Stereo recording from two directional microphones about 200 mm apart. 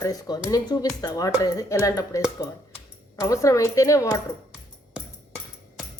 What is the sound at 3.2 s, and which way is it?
Speech, 15° left (ahead or behind).